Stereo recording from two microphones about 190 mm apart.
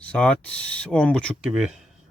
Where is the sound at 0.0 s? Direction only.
5° left (ahead or behind).